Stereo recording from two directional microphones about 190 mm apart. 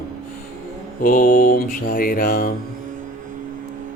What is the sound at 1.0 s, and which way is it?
Mantra, 45° left (ahead or behind).